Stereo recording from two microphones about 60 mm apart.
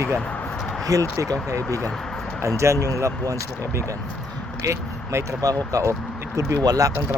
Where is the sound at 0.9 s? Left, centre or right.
Right.